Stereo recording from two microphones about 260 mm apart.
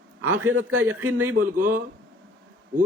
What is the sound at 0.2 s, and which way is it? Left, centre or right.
Speech, right.